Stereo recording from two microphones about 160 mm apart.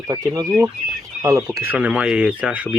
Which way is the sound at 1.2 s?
20° right (ahead or behind).